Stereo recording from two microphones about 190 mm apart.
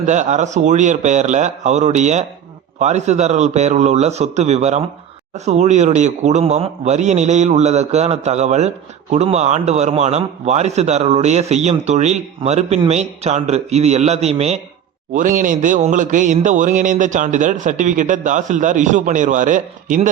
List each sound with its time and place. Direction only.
0.0 s a man's voice: 40° right (ahead or behind)